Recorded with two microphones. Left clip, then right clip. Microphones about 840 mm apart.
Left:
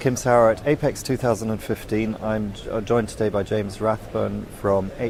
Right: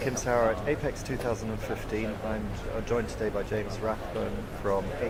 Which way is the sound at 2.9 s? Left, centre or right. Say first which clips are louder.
Left 8 dB; left.